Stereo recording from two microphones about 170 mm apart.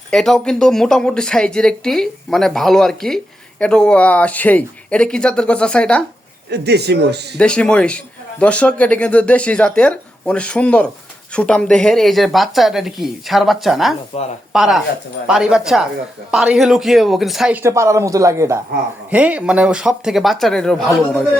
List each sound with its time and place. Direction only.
0.1 s a man's voice: 5° left (ahead or behind)
6.5 s speech: 75° right (ahead or behind)
7.3 s a man's voice: 5° left (ahead or behind)
14.1 s speech: 40° left (ahead or behind)
14.5 s speech: centre (ahead or behind)
17.6 s speech: 15° right (ahead or behind); by 21.2 s centre (ahead or behind)